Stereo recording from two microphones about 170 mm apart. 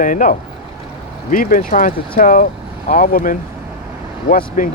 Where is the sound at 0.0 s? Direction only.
50° left (ahead or behind).